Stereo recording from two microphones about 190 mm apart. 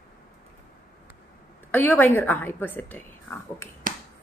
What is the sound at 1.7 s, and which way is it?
A woman's voice, 10° left (ahead or behind).